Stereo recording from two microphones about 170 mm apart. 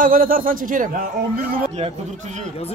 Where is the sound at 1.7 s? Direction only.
40° right (ahead or behind).